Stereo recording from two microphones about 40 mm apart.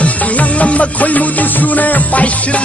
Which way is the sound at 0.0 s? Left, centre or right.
Left.